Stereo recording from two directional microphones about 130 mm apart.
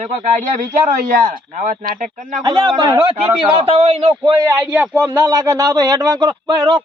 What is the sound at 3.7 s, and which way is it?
Speech, 50° right (ahead or behind).